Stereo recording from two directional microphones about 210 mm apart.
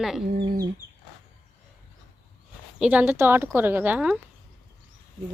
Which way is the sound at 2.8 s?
5° right (ahead or behind).